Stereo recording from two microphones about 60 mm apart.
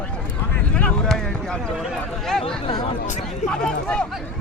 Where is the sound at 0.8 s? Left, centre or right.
Centre.